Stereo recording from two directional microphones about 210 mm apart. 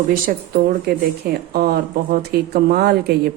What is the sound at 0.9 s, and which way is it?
Speech, 50° right (ahead or behind).